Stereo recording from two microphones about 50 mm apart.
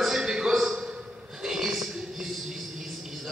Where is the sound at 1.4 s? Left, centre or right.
Centre.